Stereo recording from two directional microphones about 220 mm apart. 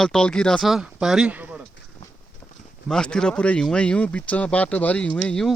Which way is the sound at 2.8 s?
5° left (ahead or behind).